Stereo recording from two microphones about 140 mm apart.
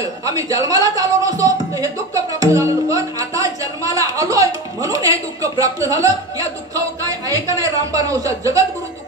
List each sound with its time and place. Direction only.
0.0 s a man's voice: 25° right (ahead or behind)